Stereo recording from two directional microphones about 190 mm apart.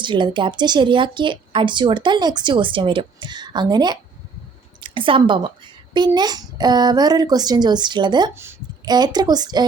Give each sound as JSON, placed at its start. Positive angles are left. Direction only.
{"t": 0.0, "sound": "a woman's voice", "side_deg": -25}